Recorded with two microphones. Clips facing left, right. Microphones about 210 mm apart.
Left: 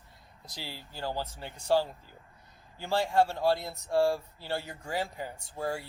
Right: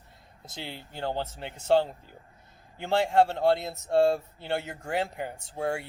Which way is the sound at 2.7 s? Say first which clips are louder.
Right 3 dB; 20° right (ahead or behind).